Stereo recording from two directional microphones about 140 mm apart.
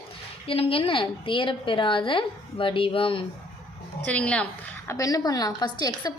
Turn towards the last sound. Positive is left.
turn(degrees=30)  # may be behind; listen again after turning